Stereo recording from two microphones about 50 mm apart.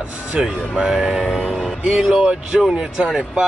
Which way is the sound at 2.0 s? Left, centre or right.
Centre.